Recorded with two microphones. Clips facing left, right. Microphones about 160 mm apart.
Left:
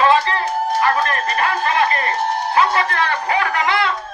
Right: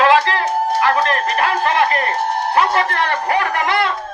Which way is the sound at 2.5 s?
55° right (ahead or behind).